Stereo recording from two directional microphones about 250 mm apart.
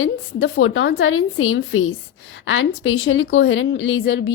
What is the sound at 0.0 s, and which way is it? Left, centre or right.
A woman's voice, left.